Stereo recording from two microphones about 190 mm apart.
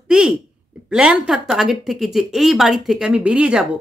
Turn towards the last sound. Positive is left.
turn(degrees=-5)  # may be behind; listen again after turning